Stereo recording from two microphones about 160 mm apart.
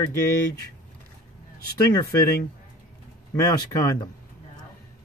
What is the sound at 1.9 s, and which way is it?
Speech, 25° left (ahead or behind).